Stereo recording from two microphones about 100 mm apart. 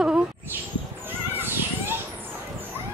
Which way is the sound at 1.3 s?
20° right (ahead or behind).